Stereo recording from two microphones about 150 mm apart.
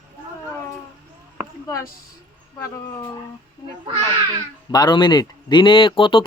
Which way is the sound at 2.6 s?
20° left (ahead or behind).